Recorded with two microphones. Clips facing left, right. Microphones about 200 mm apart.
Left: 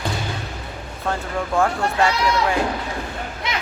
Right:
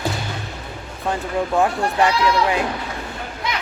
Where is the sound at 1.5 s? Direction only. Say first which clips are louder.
Even; 20° right (ahead or behind).